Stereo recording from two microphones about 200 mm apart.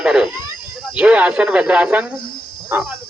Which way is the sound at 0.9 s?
5° right (ahead or behind).